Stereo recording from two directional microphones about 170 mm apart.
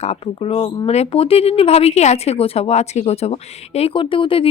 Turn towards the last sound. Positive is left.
turn(degrees=30)  # may be behind; listen again after turning